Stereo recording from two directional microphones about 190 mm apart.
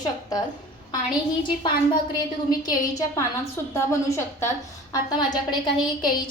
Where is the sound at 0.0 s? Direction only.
20° left (ahead or behind).